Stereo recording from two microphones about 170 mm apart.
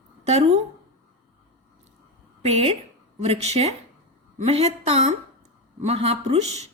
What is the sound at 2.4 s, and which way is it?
A woman's voice, 35° right (ahead or behind).